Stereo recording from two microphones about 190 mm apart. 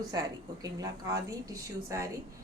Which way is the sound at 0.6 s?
20° right (ahead or behind).